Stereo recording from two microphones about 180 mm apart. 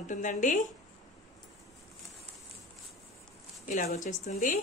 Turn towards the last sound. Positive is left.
turn(degrees=45)  # may be behind; listen again after turning